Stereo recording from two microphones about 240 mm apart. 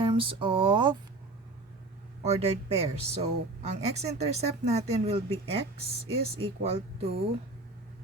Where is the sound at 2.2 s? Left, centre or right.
Right.